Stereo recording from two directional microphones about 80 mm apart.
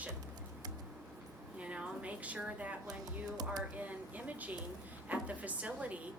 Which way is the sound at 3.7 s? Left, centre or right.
Centre.